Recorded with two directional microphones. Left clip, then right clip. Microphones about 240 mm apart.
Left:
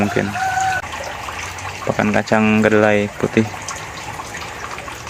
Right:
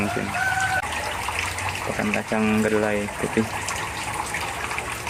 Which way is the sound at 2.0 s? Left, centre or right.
Centre.